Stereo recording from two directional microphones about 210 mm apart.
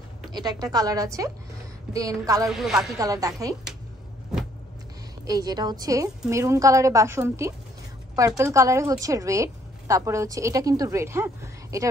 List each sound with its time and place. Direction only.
0.3 s a woman's voice: 20° right (ahead or behind)
2.4 s a woman's voice: centre (ahead or behind)
3.0 s a woman's voice: 15° right (ahead or behind)
5.2 s a woman's voice: 15° right (ahead or behind)